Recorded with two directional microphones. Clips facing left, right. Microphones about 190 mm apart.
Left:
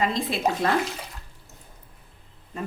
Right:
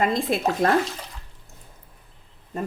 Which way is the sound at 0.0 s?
45° right (ahead or behind).